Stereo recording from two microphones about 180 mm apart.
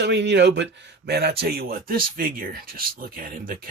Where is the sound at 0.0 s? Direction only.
75° right (ahead or behind).